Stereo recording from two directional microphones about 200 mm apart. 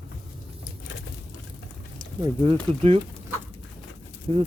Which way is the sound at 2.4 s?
25° right (ahead or behind).